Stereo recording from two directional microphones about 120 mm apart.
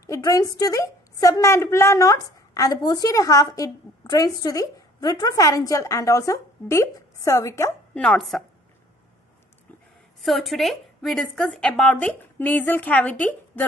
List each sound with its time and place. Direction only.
0.0 s a woman's voice: 30° left (ahead or behind)
7.9 s speech: 5° left (ahead or behind)
10.2 s a woman's voice: centre (ahead or behind)